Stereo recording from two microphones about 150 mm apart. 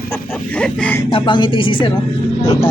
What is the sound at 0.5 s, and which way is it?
Speech, 10° left (ahead or behind).